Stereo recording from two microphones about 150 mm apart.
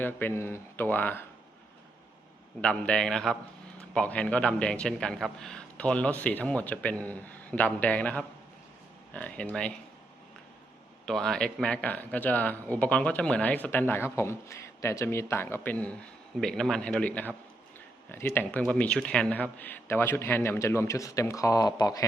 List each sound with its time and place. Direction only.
0.0 s speech: 15° left (ahead or behind)
2.6 s a man's voice: 5° left (ahead or behind)
11.0 s a man's voice: 5° left (ahead or behind)
18.7 s speech: 5° left (ahead or behind); by 22.0 s 25° left (ahead or behind)